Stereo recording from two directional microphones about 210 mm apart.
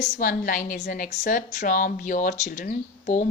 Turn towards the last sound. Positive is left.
turn(degrees=40)  # may be behind; listen again after turning